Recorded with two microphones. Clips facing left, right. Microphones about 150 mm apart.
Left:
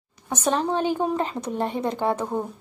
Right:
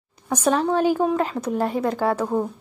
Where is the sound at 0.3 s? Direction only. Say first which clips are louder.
Right 3 dB; 10° right (ahead or behind).